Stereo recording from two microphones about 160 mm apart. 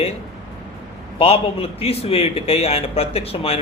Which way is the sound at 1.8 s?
40° left (ahead or behind).